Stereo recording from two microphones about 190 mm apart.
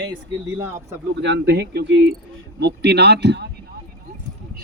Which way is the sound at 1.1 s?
65° right (ahead or behind).